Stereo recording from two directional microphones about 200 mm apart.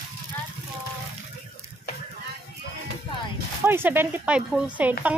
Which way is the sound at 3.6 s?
10° right (ahead or behind).